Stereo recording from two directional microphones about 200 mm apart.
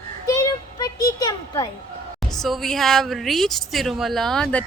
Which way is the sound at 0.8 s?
20° left (ahead or behind).